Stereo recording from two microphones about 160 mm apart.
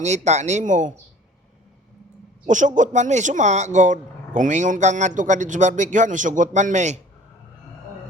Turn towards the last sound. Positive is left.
turn(degrees=-45)  # may be behind; listen again after turning